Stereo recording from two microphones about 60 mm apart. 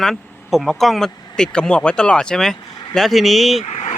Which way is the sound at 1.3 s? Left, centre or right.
Centre.